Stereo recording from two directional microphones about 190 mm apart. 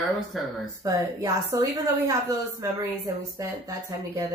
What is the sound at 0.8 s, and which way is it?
Speech, 15° right (ahead or behind).